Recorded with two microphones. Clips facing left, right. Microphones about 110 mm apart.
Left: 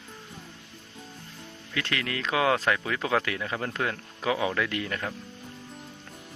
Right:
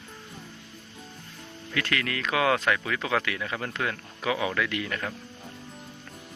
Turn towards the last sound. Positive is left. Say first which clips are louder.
# even
turn(degrees=35)  # may be behind; listen again after turning